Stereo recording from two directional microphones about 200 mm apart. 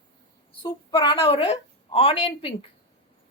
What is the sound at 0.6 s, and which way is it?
A woman's voice, 25° left (ahead or behind).